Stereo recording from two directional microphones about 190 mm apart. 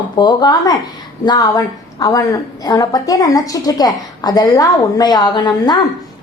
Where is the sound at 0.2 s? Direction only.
20° left (ahead or behind).